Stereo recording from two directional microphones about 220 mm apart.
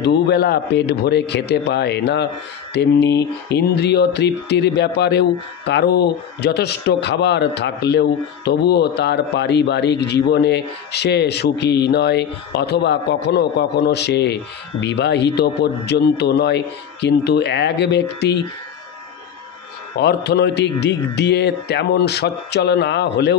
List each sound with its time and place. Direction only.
0.0 s a man's voice: 50° left (ahead or behind)
20.0 s a man's voice: 50° left (ahead or behind)